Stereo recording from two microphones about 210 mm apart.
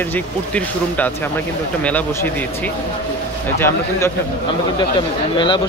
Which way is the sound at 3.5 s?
10° left (ahead or behind).